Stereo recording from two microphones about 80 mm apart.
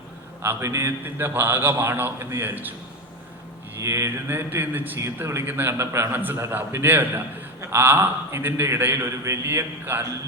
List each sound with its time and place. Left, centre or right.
0.4 s a man's voice: right
3.8 s a man's voice: right